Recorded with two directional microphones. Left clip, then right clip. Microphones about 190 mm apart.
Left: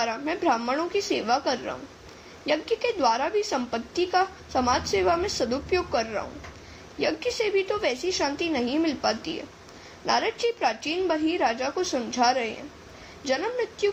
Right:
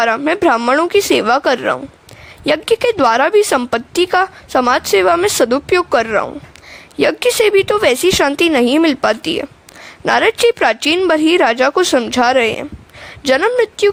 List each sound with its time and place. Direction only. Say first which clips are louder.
0.0 s a woman's voice: right 13 dB; 50° right (ahead or behind)